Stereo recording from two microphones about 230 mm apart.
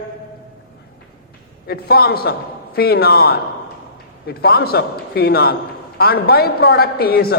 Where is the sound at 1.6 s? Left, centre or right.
Left.